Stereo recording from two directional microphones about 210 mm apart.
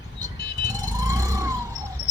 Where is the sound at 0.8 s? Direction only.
15° right (ahead or behind).